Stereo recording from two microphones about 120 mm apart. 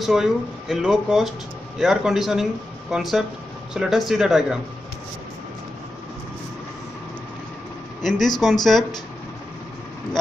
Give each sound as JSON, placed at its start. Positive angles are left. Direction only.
{"t": 0.0, "sound": "speech", "side_deg": -5}
{"t": 8.0, "sound": "speech", "side_deg": 0}